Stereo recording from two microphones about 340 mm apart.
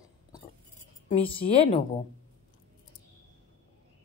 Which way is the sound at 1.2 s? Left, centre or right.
Centre.